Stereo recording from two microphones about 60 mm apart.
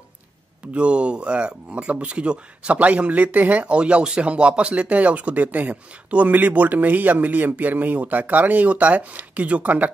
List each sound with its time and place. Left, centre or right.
0.7 s speech: centre